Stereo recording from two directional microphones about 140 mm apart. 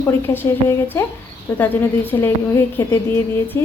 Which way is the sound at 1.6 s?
15° left (ahead or behind).